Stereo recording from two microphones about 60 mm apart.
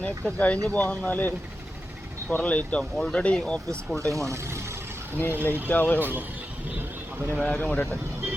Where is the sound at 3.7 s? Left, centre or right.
Right.